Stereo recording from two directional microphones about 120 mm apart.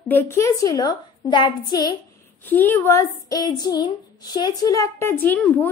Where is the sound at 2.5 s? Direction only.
15° left (ahead or behind).